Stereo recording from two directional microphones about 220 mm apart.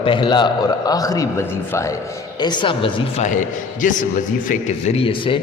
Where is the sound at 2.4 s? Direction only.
20° left (ahead or behind).